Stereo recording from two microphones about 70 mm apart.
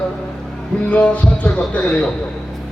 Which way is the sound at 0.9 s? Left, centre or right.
Centre.